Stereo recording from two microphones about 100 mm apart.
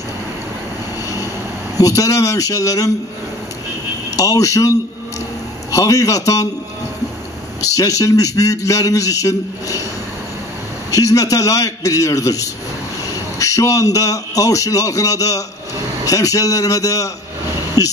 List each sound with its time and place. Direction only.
1.0 s vehicle: 35° left (ahead or behind)
1.8 s a man's voice: 35° left (ahead or behind)
4.2 s a man's voice: 35° left (ahead or behind)
7.6 s a man's voice: 35° left (ahead or behind)
10.9 s a man's voice: 35° left (ahead or behind)